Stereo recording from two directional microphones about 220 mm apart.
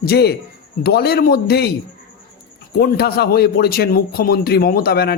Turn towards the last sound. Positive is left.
turn(degrees=45)  # may be behind; listen again after turning